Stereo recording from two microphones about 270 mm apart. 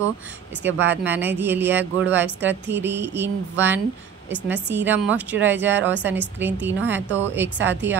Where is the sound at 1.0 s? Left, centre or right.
Centre.